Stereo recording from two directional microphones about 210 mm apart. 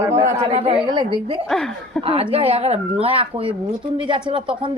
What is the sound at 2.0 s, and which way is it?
Speech, 25° right (ahead or behind).